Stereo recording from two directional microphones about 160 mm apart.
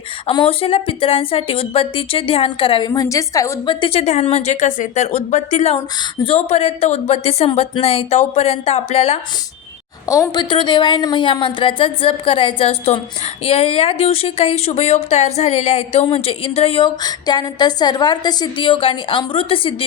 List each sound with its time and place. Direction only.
0.3 s speech: 35° left (ahead or behind)
3.8 s a woman's voice: 35° left (ahead or behind)
10.1 s speech: 25° left (ahead or behind)
17.0 s a woman's voice: 25° left (ahead or behind)